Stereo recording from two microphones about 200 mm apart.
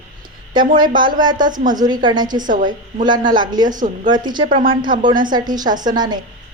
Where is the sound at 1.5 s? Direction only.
40° right (ahead or behind).